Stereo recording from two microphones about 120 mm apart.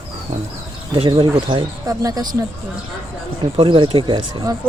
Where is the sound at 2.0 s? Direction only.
30° right (ahead or behind).